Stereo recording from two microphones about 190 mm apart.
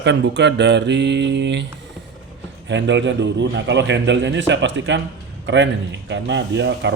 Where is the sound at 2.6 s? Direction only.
70° right (ahead or behind).